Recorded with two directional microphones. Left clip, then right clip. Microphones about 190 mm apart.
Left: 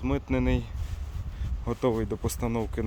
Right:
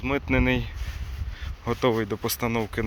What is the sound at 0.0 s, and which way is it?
Speech, 10° right (ahead or behind).